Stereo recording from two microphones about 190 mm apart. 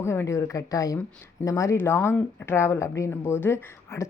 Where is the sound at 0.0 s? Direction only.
15° left (ahead or behind).